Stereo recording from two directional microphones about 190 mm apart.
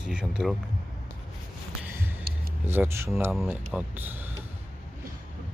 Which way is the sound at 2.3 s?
50° right (ahead or behind).